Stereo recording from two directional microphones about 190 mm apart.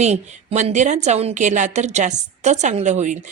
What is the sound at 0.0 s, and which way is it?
A woman's voice, 35° right (ahead or behind).